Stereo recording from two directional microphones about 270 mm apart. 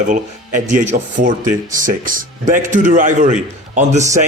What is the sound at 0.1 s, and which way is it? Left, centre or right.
Speech, right.